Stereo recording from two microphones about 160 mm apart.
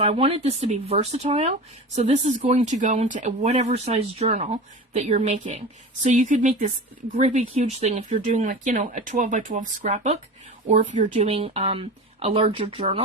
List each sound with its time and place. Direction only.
0.0 s speech: 40° right (ahead or behind)